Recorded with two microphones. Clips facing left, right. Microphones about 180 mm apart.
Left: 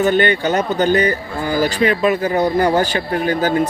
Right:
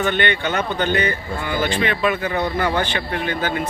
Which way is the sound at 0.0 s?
40° left (ahead or behind).